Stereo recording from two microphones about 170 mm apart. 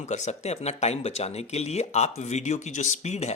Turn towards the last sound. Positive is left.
turn(degrees=40)  # may be behind; listen again after turning